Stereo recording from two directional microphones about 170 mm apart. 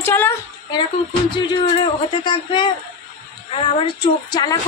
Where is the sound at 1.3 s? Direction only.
25° left (ahead or behind).